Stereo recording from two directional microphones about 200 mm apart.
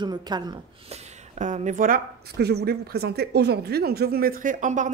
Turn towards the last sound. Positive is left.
turn(degrees=-40)  # may be behind; listen again after turning